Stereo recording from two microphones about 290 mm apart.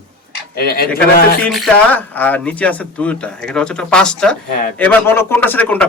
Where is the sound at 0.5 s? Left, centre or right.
Left.